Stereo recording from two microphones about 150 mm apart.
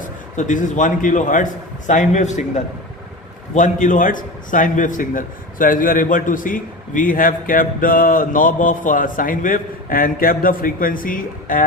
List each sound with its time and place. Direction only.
0.0 s a man's voice: 55° left (ahead or behind)
3.5 s a man's voice: 60° left (ahead or behind)